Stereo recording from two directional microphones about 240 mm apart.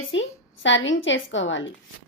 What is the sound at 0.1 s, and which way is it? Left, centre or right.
A woman's voice, left.